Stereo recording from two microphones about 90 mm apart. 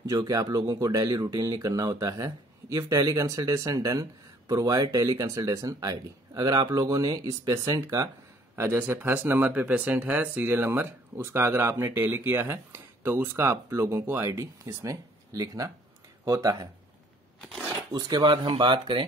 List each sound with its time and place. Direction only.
0.0 s speech: 40° right (ahead or behind)
8.5 s speech: 25° right (ahead or behind)
17.4 s speech: 5° left (ahead or behind)
17.9 s speech: 50° right (ahead or behind)
18.5 s speech: 65° right (ahead or behind)